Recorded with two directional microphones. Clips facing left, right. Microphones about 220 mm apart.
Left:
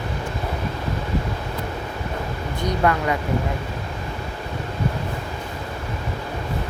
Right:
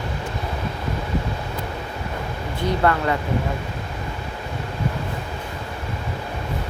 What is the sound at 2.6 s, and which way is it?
Speech, 15° left (ahead or behind).